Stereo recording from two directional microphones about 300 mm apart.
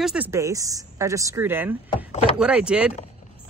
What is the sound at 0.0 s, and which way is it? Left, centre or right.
A woman's voice, centre.